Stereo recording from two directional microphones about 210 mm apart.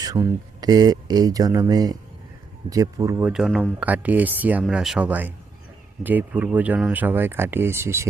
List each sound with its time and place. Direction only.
0.0 s speech: 15° right (ahead or behind)